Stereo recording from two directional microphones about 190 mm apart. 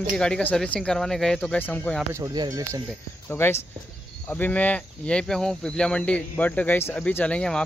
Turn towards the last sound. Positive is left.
turn(degrees=5)  # may be behind; listen again after turning